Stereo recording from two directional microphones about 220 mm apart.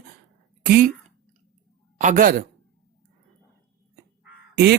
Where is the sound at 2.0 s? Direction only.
35° right (ahead or behind).